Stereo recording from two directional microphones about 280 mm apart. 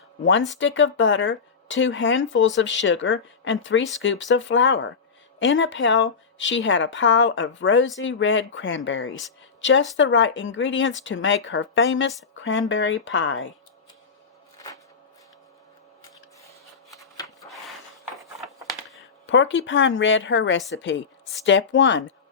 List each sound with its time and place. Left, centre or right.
0.5 s speech: left
17.4 s a sound: centre
19.2 s speech: left